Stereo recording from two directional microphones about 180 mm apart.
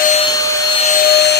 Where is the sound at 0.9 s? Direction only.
60° left (ahead or behind).